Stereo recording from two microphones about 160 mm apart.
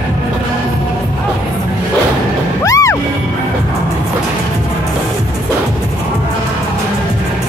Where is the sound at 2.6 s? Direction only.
20° left (ahead or behind).